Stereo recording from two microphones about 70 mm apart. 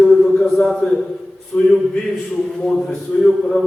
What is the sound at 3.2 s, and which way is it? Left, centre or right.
Speech, centre.